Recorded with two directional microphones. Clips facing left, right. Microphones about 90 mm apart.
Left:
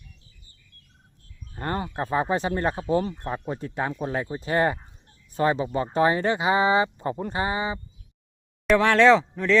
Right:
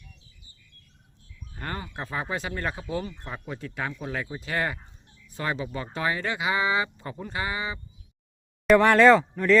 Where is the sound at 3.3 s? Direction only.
30° left (ahead or behind).